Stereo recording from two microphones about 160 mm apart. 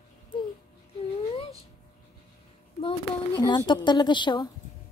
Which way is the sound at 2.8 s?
30° left (ahead or behind).